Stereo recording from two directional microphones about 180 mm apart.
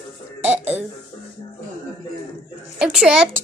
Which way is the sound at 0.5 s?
35° right (ahead or behind).